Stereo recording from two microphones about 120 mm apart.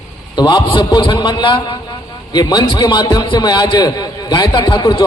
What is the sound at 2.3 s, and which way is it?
A man's voice, 35° left (ahead or behind).